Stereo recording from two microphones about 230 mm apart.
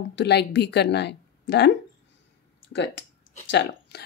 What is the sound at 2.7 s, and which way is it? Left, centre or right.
Speech, left.